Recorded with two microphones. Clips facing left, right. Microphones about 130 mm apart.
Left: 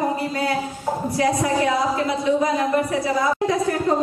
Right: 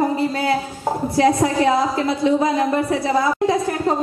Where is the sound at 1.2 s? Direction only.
30° right (ahead or behind).